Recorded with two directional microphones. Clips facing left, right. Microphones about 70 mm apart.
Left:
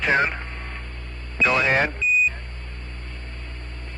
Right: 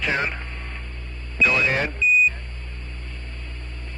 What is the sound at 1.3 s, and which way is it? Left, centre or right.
Speech, left.